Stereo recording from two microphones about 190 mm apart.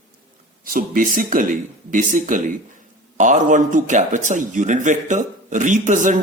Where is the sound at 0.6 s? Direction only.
50° right (ahead or behind).